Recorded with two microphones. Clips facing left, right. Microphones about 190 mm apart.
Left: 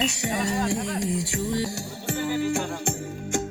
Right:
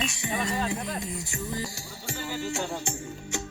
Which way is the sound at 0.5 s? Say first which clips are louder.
Left 4 dB; 85° left.